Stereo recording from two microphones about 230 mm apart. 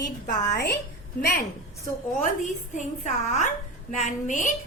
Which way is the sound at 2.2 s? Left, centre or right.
Left.